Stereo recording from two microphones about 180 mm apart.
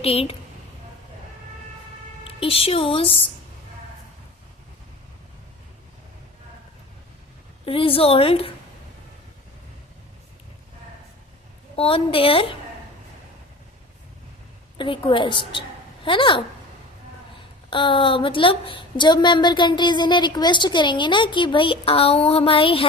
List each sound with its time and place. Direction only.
0.0 s a woman's voice: 30° left (ahead or behind)
2.2 s a woman's voice: 30° left (ahead or behind)
7.6 s a woman's voice: 30° left (ahead or behind)
11.8 s a woman's voice: 30° left (ahead or behind)
14.8 s a woman's voice: 30° left (ahead or behind)
17.7 s a woman's voice: 30° left (ahead or behind)